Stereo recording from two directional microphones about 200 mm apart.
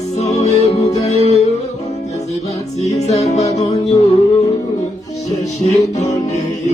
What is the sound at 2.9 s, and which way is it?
Music, 35° left (ahead or behind).